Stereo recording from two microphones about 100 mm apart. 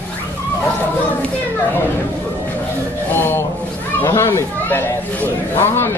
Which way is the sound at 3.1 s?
25° left (ahead or behind).